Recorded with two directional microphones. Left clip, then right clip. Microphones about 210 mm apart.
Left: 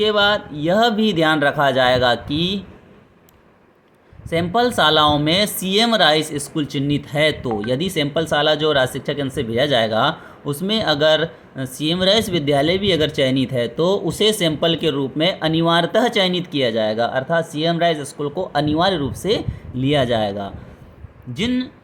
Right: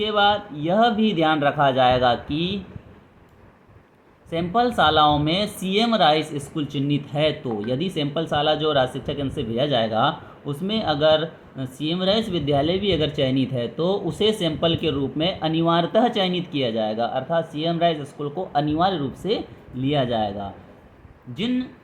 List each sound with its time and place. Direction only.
0.0 s speech: 35° left (ahead or behind)
4.3 s speech: 35° left (ahead or behind)